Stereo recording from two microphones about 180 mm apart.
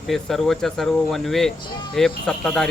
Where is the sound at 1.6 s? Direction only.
25° left (ahead or behind).